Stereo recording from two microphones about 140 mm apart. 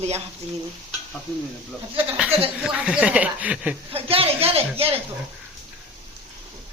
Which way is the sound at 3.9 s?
45° right (ahead or behind).